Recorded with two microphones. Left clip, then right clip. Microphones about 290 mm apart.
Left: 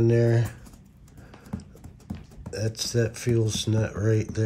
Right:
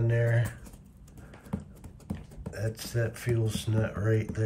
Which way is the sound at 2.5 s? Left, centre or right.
Centre.